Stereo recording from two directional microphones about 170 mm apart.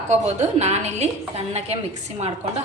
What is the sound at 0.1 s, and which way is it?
A woman's voice, 40° right (ahead or behind).